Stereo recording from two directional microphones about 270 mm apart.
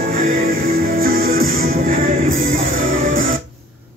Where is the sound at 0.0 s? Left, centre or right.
Right.